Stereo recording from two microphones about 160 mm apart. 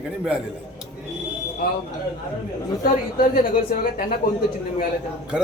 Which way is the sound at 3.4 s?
55° left (ahead or behind).